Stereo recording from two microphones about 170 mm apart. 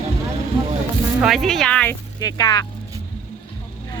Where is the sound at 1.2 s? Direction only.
Centre (ahead or behind).